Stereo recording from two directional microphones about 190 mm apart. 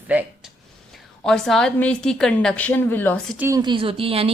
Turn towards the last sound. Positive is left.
turn(degrees=-30)  # may be behind; listen again after turning